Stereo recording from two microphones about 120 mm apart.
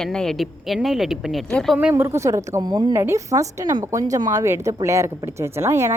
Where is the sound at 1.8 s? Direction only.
20° right (ahead or behind).